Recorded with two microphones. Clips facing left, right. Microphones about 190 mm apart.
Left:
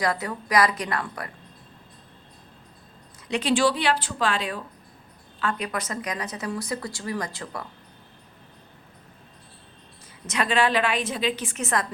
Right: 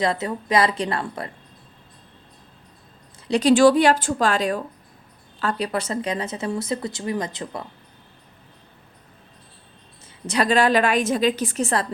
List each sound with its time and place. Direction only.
0.0 s speech: 25° right (ahead or behind)
3.2 s a woman's voice: 40° right (ahead or behind); by 7.6 s 20° right (ahead or behind)
10.2 s a woman's voice: 35° right (ahead or behind)